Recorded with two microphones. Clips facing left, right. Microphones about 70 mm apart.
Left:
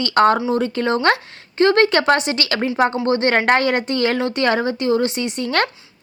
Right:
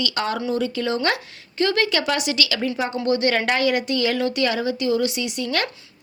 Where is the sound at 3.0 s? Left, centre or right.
Left.